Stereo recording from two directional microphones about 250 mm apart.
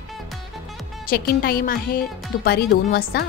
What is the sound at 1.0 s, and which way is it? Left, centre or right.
Speech, left.